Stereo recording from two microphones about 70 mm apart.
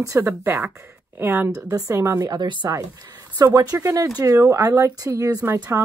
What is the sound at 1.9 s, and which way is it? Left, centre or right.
Speech, right.